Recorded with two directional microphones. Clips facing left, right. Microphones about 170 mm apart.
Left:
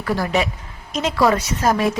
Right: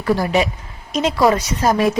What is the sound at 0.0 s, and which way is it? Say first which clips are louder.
A woman's voice: right 3 dB; 15° right (ahead or behind).